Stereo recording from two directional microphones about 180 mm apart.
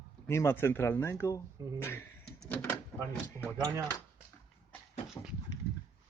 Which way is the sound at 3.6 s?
20° right (ahead or behind).